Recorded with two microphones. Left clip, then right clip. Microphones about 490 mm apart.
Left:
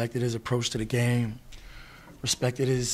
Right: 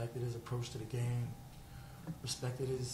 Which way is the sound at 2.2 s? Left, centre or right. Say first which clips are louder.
Left 14 dB; left.